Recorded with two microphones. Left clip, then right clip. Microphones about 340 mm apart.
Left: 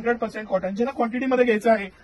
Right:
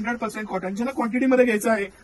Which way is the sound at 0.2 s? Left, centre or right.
Centre.